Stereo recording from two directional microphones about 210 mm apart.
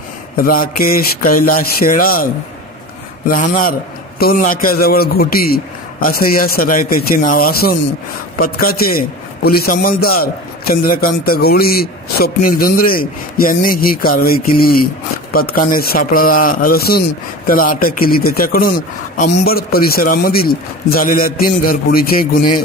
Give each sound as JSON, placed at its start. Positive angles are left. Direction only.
{"t": 0.4, "sound": "a man's voice", "side_deg": 45}
{"t": 3.3, "sound": "a man's voice", "side_deg": 40}